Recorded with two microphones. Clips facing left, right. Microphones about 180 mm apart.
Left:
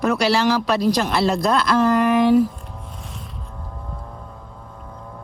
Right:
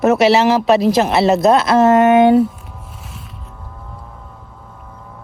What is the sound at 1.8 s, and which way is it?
Speech, 90° right.